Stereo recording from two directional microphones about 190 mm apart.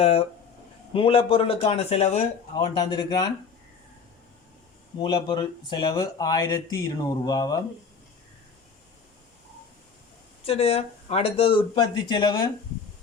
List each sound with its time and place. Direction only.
0.0 s speech: 30° left (ahead or behind)
2.8 s speech: 20° left (ahead or behind)
4.9 s speech: 25° left (ahead or behind)
10.4 s speech: 30° left (ahead or behind)